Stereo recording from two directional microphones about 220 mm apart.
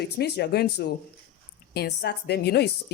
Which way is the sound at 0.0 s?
45° left (ahead or behind).